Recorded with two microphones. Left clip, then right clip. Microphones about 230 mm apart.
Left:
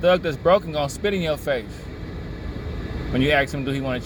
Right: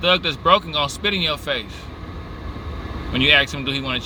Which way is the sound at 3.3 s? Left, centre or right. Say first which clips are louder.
Right 3 dB; right.